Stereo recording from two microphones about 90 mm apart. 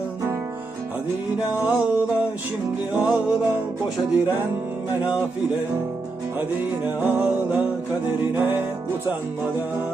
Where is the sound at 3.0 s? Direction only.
10° right (ahead or behind).